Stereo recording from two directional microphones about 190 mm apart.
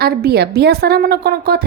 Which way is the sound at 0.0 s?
55° right (ahead or behind).